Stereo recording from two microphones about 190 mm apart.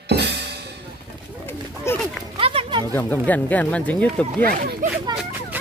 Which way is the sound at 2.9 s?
10° left (ahead or behind).